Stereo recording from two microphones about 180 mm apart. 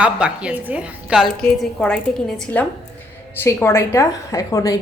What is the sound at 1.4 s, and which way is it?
A woman's voice, 5° left (ahead or behind).